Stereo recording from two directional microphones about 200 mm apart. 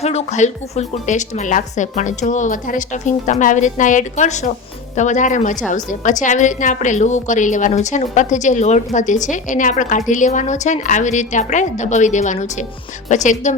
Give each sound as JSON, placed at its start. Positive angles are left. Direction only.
{"t": 0.0, "sound": "a woman's voice", "side_deg": 30}